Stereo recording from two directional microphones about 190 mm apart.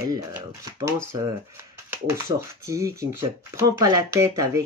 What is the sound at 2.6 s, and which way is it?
Speech, 15° right (ahead or behind).